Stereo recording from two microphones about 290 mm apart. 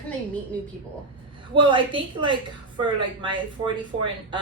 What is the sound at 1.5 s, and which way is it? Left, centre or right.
A woman's voice, centre.